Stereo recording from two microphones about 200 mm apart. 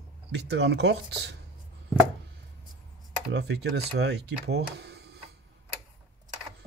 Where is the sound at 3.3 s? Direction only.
60° right (ahead or behind).